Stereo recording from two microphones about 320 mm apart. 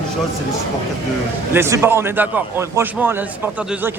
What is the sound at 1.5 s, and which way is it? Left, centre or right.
A man's voice, centre.